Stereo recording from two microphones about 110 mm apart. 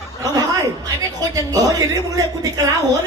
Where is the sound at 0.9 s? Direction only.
35° right (ahead or behind).